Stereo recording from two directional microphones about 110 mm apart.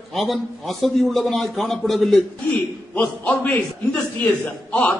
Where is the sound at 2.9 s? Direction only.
15° left (ahead or behind).